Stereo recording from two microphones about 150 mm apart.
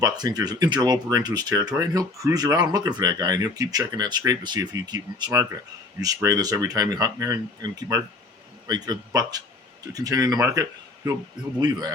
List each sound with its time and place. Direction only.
0.0 s speech: 25° right (ahead or behind)